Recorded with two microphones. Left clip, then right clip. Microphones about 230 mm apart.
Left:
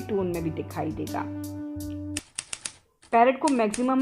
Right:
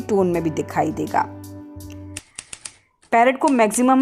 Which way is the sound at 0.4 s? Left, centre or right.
Right.